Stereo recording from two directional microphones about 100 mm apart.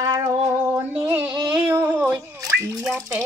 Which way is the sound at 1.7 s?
20° right (ahead or behind).